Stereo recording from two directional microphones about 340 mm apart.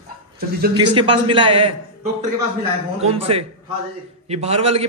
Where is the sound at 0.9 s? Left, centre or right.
Centre.